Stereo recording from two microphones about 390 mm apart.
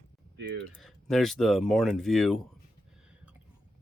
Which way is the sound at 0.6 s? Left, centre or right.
Centre.